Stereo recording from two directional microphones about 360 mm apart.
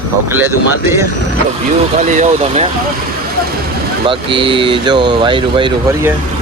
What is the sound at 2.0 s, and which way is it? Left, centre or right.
Speech, right.